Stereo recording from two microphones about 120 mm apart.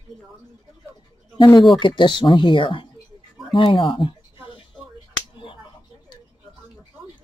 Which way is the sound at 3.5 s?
45° left (ahead or behind).